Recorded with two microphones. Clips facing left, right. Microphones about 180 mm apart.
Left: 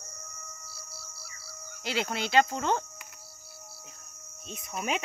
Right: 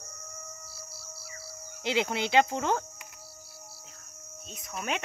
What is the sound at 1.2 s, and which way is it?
Cricket, 20° right (ahead or behind).